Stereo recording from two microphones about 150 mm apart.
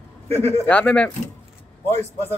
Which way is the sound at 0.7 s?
10° left (ahead or behind).